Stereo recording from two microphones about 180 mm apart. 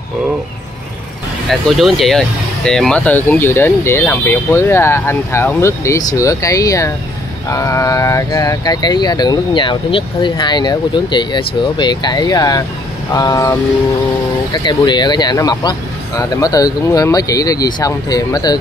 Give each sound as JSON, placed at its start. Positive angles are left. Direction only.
{"t": 1.5, "sound": "speech", "side_deg": 0}